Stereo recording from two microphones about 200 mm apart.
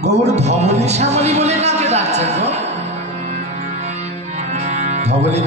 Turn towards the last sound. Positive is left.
turn(degrees=-35)  # may be behind; listen again after turning